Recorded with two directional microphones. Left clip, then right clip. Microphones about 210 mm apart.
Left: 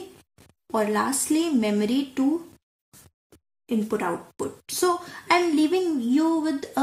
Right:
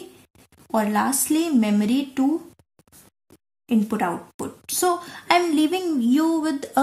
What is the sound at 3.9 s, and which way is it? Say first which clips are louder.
Speech: right 2 dB; 40° right (ahead or behind).